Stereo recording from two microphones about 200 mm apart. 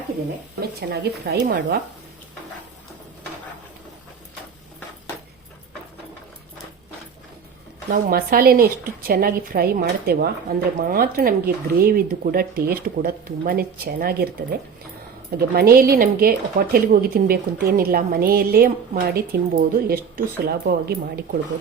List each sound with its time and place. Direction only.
0.8 s speech: 50° right (ahead or behind)
7.9 s speech: 50° right (ahead or behind)